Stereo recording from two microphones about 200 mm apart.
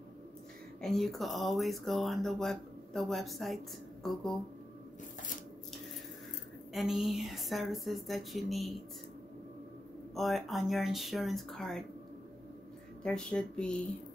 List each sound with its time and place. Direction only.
0.7 s speech: centre (ahead or behind)
6.7 s speech: centre (ahead or behind)
10.1 s speech: centre (ahead or behind)
13.0 s speech: 5° left (ahead or behind)